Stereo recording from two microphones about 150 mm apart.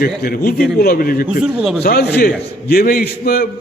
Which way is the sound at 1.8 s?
90° left.